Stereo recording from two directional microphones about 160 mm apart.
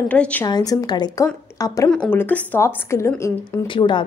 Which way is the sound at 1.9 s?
10° left (ahead or behind).